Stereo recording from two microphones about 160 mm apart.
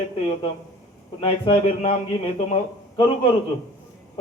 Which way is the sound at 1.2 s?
40° left (ahead or behind).